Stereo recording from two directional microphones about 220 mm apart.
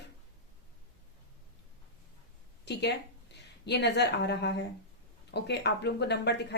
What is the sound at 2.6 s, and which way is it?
Speech, 50° left (ahead or behind).